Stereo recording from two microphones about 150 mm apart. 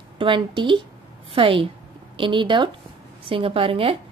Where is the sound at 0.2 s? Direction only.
35° right (ahead or behind).